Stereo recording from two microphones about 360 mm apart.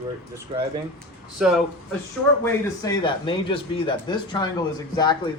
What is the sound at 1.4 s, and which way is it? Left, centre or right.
Speech, centre.